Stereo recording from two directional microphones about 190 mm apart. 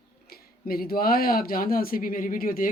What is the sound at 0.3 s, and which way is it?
Speech, 50° left (ahead or behind).